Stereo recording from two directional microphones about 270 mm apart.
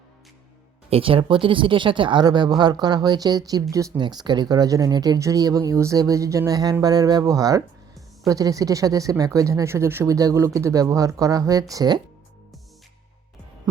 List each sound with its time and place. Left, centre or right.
0.9 s speech: right